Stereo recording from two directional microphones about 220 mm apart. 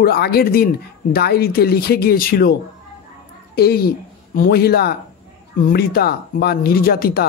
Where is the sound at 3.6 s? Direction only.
45° left (ahead or behind).